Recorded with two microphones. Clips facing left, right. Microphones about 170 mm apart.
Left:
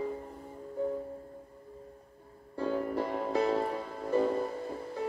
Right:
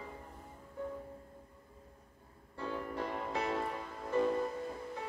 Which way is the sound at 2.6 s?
35° left (ahead or behind).